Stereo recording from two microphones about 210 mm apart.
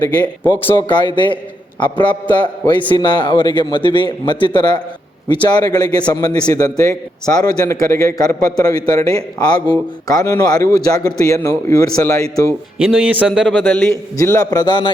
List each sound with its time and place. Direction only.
0.4 s a man's voice: 20° left (ahead or behind)
12.8 s a man's voice: centre (ahead or behind); by 14.9 s 20° left (ahead or behind)